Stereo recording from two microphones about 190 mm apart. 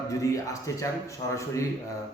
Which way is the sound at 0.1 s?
15° left (ahead or behind).